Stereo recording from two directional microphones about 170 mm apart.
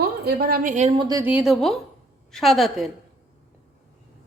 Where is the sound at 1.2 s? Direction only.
5° right (ahead or behind).